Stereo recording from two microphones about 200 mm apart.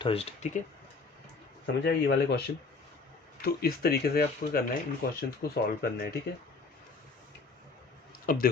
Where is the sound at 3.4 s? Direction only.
50° left (ahead or behind).